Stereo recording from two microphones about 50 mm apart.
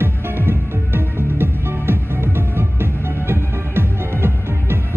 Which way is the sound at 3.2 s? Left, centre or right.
Right.